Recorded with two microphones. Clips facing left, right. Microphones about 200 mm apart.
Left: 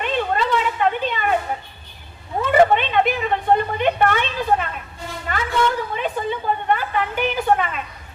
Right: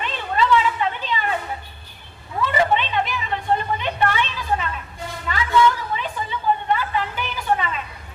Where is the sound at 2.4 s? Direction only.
55° left (ahead or behind).